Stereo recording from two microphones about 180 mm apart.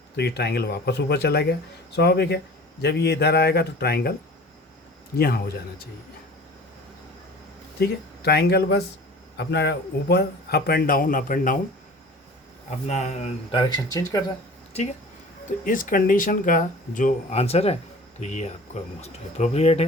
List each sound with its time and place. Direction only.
0.2 s a man's voice: 65° left (ahead or behind)
5.1 s a man's voice: 60° left (ahead or behind)
7.8 s a man's voice: 65° left (ahead or behind)
12.9 s speech: 40° left (ahead or behind)
13.6 s speech: 25° left (ahead or behind)
14.7 s speech: 35° left (ahead or behind)
15.4 s speech: 50° left (ahead or behind)